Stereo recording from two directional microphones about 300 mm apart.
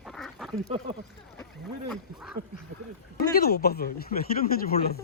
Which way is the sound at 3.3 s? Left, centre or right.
Left.